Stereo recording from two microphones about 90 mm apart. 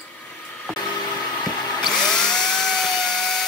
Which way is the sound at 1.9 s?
5° left (ahead or behind).